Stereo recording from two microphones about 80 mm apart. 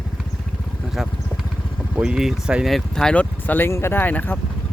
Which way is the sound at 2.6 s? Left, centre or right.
Centre.